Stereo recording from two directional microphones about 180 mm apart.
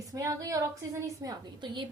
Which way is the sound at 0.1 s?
20° right (ahead or behind).